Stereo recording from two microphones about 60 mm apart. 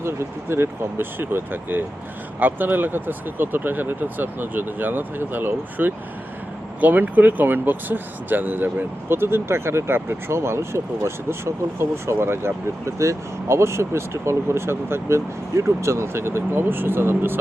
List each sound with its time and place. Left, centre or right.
0.0 s speech: right